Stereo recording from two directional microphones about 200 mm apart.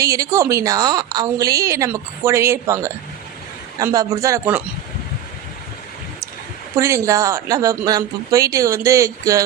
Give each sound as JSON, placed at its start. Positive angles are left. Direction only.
{"t": 0.0, "sound": "a woman's voice", "side_deg": -15}
{"t": 6.7, "sound": "a woman's voice", "side_deg": -15}